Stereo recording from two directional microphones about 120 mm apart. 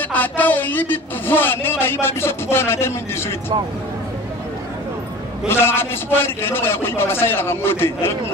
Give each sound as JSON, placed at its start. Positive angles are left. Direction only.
{"t": 0.1, "sound": "a man's voice", "side_deg": 15}
{"t": 5.5, "sound": "a man's voice", "side_deg": 20}